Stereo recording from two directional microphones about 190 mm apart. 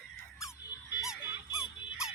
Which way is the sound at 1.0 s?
5° right (ahead or behind).